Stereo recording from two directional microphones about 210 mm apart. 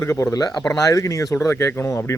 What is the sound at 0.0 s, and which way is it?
A man's voice, 15° left (ahead or behind).